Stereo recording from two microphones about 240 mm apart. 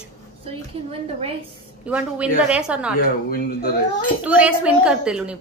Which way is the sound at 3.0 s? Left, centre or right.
Left.